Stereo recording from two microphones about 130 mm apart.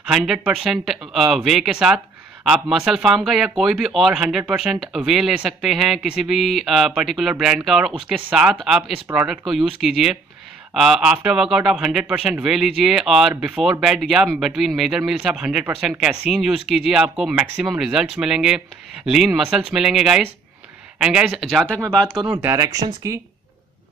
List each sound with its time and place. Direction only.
0.1 s speech: 5° right (ahead or behind)
21.4 s speech: centre (ahead or behind)
22.3 s speech: 20° right (ahead or behind)